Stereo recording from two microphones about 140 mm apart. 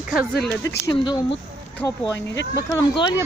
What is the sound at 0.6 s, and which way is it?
Speech, 25° left (ahead or behind).